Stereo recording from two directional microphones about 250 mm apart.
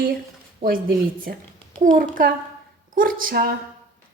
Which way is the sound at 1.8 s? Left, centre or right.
Right.